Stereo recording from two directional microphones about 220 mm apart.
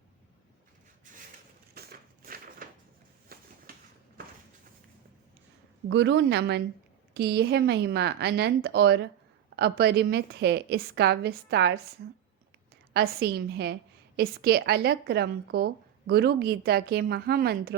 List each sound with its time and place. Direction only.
1.1 s a sound: 35° right (ahead or behind)
5.9 s speech: 55° right (ahead or behind)
12.9 s speech: 45° right (ahead or behind)